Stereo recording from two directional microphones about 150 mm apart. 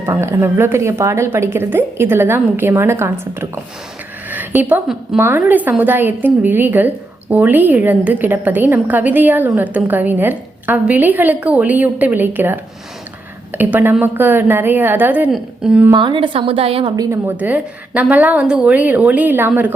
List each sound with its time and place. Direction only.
0.0 s a woman's voice: 20° right (ahead or behind)
15.9 s a woman's voice: 30° right (ahead or behind)
17.0 s a woman's voice: 15° right (ahead or behind)